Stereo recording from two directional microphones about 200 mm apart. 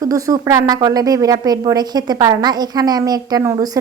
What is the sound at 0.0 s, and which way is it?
A woman's voice, 15° right (ahead or behind).